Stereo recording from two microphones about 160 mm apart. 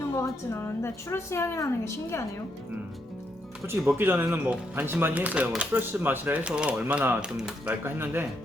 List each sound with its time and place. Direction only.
0.1 s a woman's voice: 15° left (ahead or behind)
3.9 s speech: 10° right (ahead or behind)